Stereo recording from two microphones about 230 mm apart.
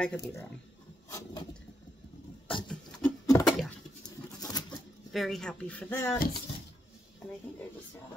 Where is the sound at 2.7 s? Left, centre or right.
Centre.